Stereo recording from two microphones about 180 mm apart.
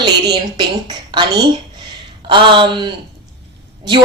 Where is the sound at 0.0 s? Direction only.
20° right (ahead or behind).